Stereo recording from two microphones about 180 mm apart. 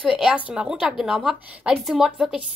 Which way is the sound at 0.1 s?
5° right (ahead or behind).